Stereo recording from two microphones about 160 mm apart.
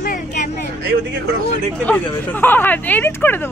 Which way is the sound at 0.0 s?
60° left (ahead or behind).